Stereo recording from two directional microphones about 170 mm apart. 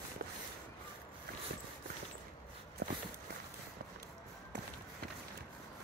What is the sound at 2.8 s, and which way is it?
Walk, 75° right (ahead or behind).